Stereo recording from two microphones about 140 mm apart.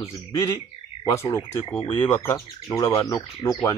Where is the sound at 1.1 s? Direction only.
20° left (ahead or behind).